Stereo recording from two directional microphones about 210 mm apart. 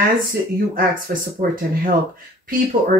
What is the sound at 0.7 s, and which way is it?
Speech, 40° right (ahead or behind).